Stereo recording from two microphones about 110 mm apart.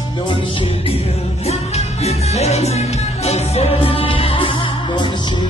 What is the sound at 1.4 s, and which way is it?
Music, 75° left (ahead or behind).